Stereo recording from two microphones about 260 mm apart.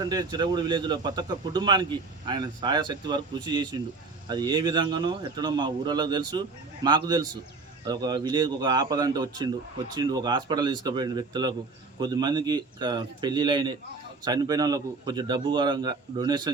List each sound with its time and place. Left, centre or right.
0.0 s speech: centre